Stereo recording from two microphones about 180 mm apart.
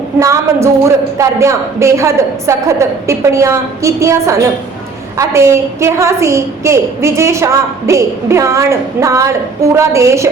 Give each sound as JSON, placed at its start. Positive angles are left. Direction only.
{"t": 0.2, "sound": "a woman's voice", "side_deg": -15}